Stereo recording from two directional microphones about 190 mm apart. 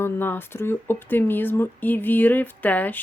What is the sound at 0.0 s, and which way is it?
Speech, 10° left (ahead or behind).